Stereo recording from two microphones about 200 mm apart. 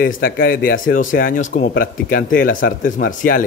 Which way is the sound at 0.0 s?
45° left (ahead or behind).